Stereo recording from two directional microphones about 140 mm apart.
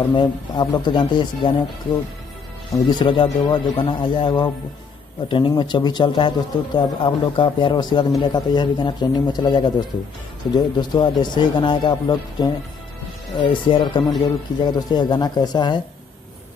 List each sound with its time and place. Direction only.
0.0 s speech: 30° left (ahead or behind)
2.7 s speech: 30° left (ahead or behind)
5.6 s speech: 30° left (ahead or behind)